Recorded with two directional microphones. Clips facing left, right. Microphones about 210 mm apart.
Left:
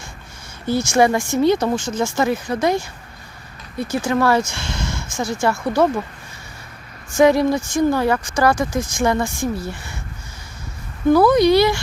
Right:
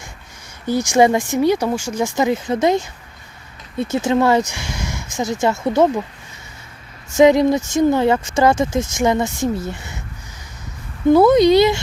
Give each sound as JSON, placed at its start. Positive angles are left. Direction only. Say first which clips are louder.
{"t": 0.7, "sound": "speech", "louder": "right 2 dB", "side_deg": -15}
{"t": 7.2, "sound": "speech", "louder": "right 2 dB", "side_deg": -20}
{"t": 11.1, "sound": "speech", "louder": "right 2 dB", "side_deg": -20}